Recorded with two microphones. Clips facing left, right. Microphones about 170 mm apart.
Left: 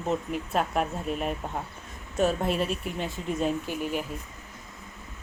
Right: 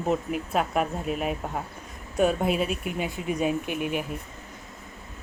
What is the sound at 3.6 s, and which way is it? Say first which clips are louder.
Speech: right 2 dB; 55° right (ahead or behind).